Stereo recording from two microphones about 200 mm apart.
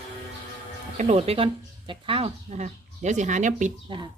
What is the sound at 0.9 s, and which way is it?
Speech, 35° right (ahead or behind).